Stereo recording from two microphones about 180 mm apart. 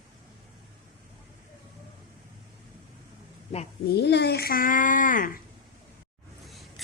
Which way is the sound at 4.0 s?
65° left (ahead or behind).